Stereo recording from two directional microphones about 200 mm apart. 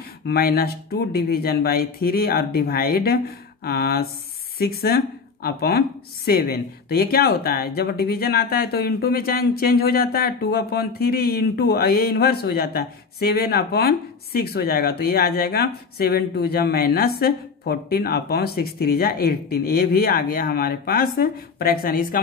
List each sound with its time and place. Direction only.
0.3 s speech: 50° left (ahead or behind)